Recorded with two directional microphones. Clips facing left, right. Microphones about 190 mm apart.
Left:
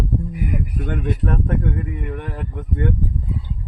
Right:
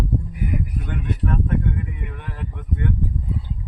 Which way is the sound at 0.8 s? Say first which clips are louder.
Left 3 dB; 50° left (ahead or behind).